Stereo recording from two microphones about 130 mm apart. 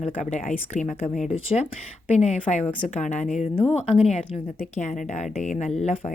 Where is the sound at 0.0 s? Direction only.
60° left (ahead or behind).